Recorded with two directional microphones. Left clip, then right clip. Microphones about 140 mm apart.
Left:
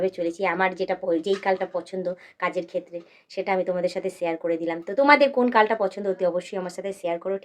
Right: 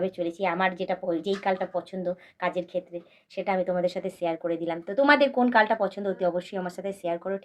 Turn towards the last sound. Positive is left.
turn(degrees=35)  # may be behind; listen again after turning